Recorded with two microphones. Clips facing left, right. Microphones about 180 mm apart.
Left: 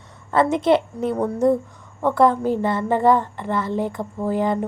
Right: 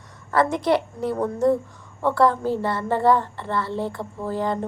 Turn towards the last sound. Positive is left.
turn(degrees=15)  # may be behind; listen again after turning